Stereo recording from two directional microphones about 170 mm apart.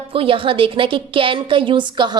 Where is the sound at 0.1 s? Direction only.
30° right (ahead or behind).